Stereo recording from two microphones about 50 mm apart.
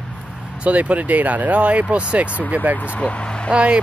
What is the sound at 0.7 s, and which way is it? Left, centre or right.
Speech, right.